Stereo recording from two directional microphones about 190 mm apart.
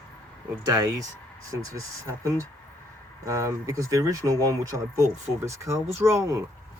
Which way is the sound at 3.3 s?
15° right (ahead or behind).